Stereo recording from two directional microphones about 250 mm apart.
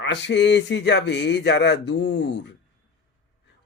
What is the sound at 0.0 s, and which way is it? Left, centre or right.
Speech, left.